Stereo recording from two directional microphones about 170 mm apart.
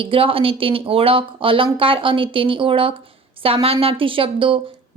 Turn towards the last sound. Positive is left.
turn(degrees=-30)  # may be behind; listen again after turning